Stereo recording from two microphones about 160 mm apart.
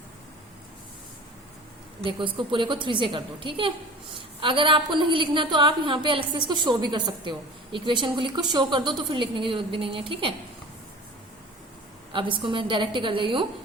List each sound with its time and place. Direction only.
2.0 s a woman's voice: 30° right (ahead or behind)
12.1 s a woman's voice: 30° right (ahead or behind)